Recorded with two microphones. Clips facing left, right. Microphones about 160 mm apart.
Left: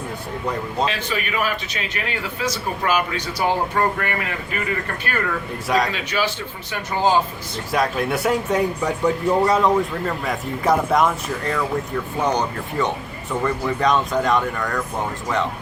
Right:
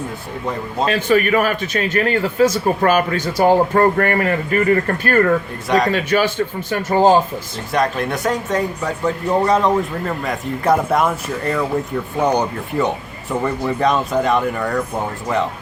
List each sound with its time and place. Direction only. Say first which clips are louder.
0.9 s a man's voice: right 10 dB; 50° right (ahead or behind)
5.6 s speech: right 3 dB; centre (ahead or behind)
5.9 s a man's voice: right 7 dB; 50° right (ahead or behind)
7.7 s speech: right 2 dB; 5° left (ahead or behind)
13.4 s speech: right 2 dB; 5° right (ahead or behind)